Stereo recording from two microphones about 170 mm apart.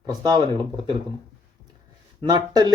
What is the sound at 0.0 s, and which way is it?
Speech, 25° right (ahead or behind).